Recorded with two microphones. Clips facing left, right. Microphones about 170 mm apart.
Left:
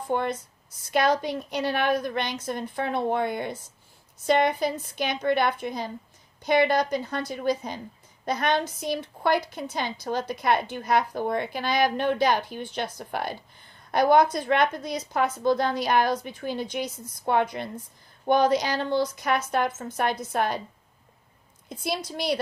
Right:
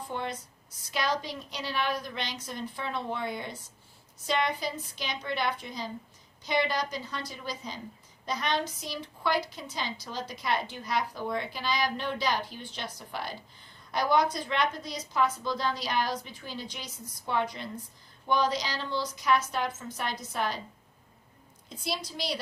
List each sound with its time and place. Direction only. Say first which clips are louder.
0.1 s a woman's voice: left 10 dB; 55° left (ahead or behind)
21.7 s a woman's voice: left 5 dB; 55° left (ahead or behind)